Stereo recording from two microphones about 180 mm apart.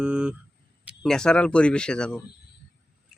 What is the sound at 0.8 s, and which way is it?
Speech, 5° right (ahead or behind).